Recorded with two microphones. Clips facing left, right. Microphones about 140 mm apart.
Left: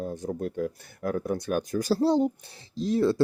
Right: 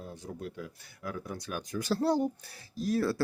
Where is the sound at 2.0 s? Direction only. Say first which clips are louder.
Left 4 dB; 20° left (ahead or behind).